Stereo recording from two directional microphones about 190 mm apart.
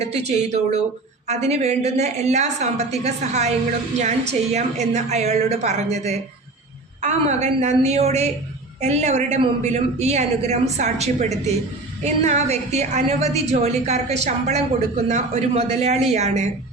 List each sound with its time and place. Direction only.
0.0 s a woman's voice: 35° right (ahead or behind)